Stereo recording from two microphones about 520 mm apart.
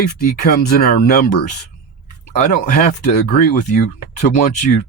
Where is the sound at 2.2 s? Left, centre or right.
Centre.